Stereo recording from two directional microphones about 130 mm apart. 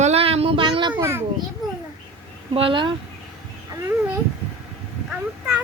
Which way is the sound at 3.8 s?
20° right (ahead or behind).